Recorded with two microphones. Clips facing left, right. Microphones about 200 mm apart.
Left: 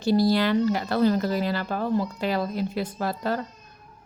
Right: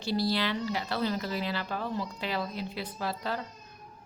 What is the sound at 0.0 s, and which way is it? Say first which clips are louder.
Speech: left 8 dB; 45° left (ahead or behind).